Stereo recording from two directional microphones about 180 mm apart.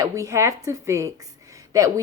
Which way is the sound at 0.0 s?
15° right (ahead or behind).